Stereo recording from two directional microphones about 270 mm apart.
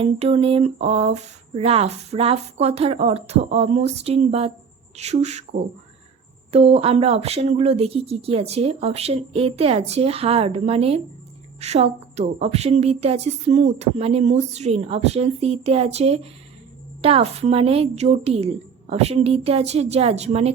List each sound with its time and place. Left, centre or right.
0.0 s a woman's voice: right